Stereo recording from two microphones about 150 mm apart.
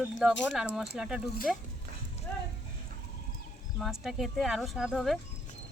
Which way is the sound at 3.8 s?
Centre (ahead or behind).